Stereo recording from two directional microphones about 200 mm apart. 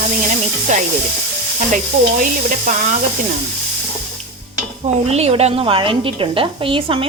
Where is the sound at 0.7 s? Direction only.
40° right (ahead or behind).